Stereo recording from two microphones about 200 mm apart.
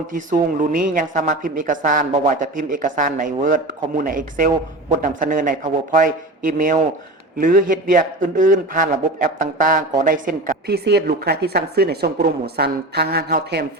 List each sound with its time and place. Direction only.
0.1 s a woman's voice: 45° right (ahead or behind)